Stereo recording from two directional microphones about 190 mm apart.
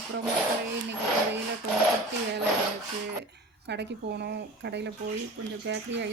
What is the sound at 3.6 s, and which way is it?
Speech, 65° right (ahead or behind).